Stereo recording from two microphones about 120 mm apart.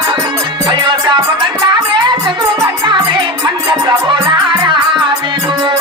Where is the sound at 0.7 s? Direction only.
40° right (ahead or behind).